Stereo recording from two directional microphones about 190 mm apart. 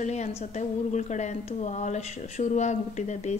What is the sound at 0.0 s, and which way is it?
A woman's voice, 35° left (ahead or behind).